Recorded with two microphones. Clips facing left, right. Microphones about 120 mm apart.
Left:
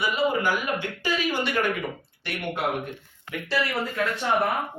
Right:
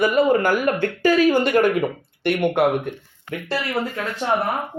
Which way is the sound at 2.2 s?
60° right (ahead or behind).